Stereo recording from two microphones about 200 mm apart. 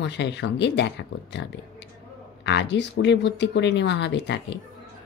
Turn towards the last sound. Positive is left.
turn(degrees=60)  # may be behind; listen again after turning